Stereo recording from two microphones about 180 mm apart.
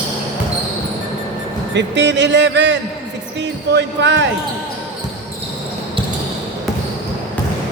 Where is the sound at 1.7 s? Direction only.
75° right (ahead or behind).